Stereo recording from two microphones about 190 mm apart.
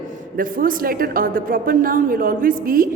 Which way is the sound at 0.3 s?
50° right (ahead or behind).